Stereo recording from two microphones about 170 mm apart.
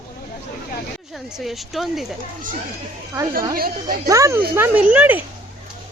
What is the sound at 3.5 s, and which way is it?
Speech, 60° right (ahead or behind).